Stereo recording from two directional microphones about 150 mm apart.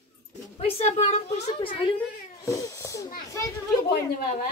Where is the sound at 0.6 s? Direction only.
40° left (ahead or behind).